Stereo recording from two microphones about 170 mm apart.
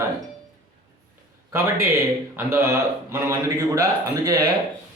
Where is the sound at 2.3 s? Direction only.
15° right (ahead or behind).